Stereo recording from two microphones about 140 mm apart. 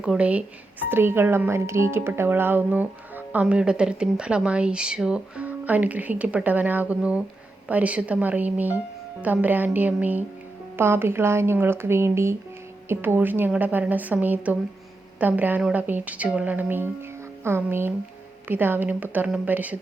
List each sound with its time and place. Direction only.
0.0 s speech: 10° right (ahead or behind)